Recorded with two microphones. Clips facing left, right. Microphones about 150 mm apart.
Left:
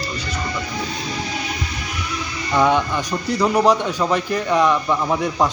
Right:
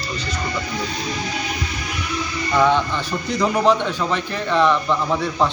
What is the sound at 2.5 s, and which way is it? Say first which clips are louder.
A man's voice: left 1 dB; 10° left (ahead or behind).